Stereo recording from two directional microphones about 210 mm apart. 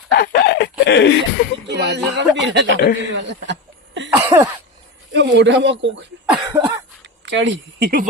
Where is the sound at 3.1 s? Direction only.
55° right (ahead or behind).